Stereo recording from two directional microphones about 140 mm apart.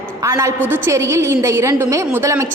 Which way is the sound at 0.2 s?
20° right (ahead or behind).